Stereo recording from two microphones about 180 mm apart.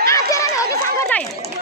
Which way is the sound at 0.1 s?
15° left (ahead or behind).